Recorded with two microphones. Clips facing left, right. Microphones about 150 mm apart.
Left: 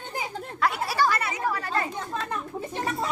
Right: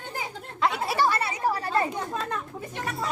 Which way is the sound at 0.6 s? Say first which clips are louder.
Even; 25° right (ahead or behind).